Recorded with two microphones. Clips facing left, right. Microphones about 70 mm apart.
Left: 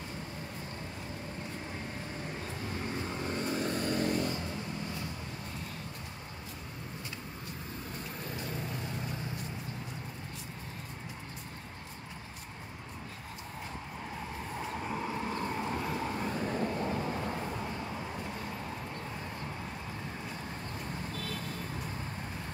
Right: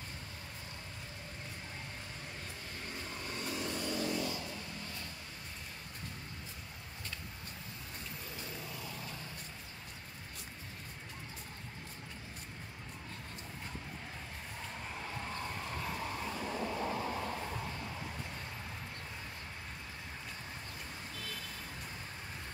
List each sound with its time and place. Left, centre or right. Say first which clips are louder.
3.5 s vehicle: left 4 dB; left